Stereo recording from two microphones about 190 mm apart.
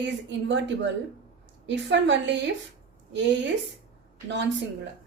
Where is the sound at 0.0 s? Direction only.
70° right (ahead or behind).